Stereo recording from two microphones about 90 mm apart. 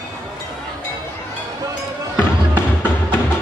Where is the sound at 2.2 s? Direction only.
25° left (ahead or behind).